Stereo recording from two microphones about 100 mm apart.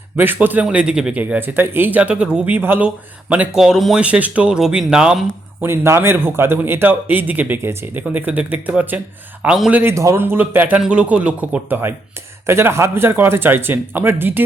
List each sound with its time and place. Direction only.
0.2 s speech: 20° right (ahead or behind)
1.2 s speech: 20° right (ahead or behind)
5.6 s speech: 25° right (ahead or behind); by 9.8 s 10° right (ahead or behind)
9.8 s speech: 30° right (ahead or behind)